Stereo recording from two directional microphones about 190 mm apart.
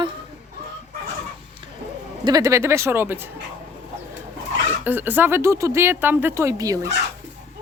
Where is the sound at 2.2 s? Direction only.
20° right (ahead or behind).